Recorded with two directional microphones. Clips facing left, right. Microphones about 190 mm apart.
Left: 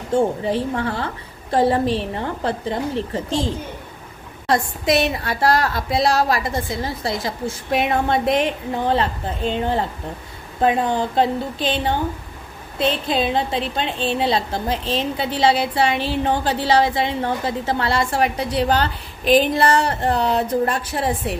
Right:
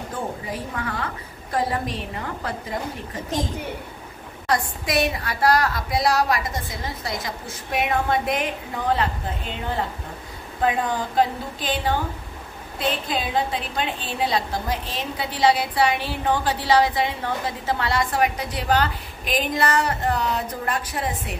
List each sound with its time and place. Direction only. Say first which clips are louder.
0.1 s a woman's voice: left 13 dB; 30° left (ahead or behind)
11.1 s a woman's voice: left 3 dB; 25° left (ahead or behind)